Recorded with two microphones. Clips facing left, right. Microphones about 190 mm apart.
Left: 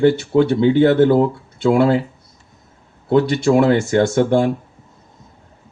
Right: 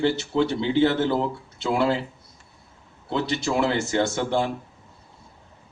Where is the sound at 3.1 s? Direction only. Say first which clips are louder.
Left 10 dB; 50° left (ahead or behind).